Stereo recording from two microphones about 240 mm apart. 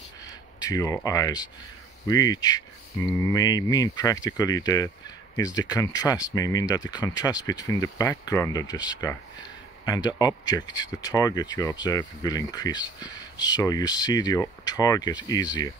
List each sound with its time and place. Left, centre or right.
0.6 s speech: centre